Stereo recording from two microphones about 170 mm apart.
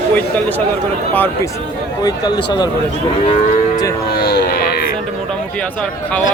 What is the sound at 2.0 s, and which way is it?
Speech, 25° left (ahead or behind).